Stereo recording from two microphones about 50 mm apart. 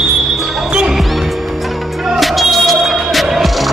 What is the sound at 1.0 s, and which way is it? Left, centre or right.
Music, centre.